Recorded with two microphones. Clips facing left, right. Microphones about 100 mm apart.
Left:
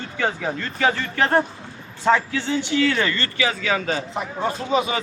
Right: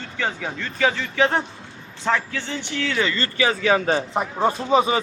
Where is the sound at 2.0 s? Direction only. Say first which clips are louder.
Left 4 dB; 15° left (ahead or behind).